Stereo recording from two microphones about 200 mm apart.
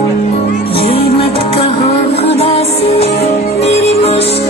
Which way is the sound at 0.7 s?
30° left (ahead or behind).